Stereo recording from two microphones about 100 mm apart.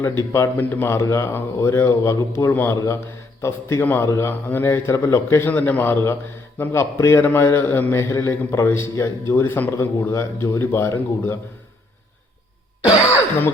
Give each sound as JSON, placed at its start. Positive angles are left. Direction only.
{"t": 0.3, "sound": "a man's voice", "side_deg": 25}